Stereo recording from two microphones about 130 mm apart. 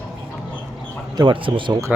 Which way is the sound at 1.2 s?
40° right (ahead or behind).